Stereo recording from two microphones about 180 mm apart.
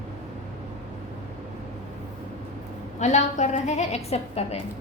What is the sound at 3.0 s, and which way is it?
A woman's voice, 40° left (ahead or behind).